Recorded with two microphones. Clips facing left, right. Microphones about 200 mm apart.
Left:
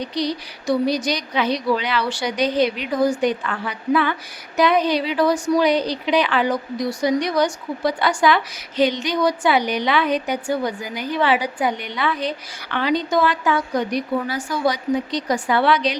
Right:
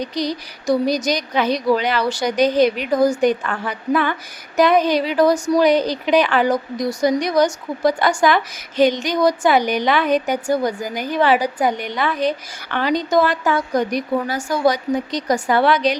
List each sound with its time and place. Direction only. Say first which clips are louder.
0.0 s a woman's voice: right 1 dB; 45° right (ahead or behind)